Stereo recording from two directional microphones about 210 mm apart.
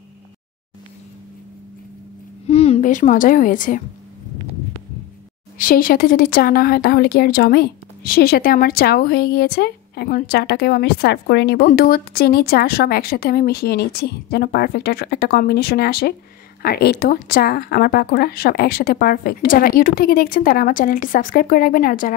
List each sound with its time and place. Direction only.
2.4 s a woman's voice: 30° left (ahead or behind)
5.6 s a woman's voice: 40° left (ahead or behind)